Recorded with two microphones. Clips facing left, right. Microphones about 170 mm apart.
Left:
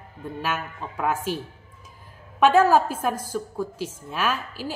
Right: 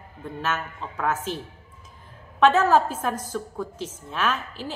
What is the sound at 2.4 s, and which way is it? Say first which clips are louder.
A woman's voice: left 1 dB; 10° left (ahead or behind).